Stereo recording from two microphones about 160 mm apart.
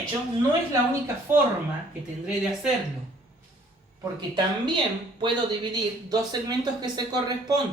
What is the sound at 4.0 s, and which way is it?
Speech, 25° right (ahead or behind).